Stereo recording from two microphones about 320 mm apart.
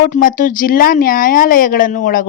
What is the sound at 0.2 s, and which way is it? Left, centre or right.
Speech, left.